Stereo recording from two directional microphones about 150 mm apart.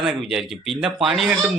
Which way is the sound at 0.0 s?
5° right (ahead or behind).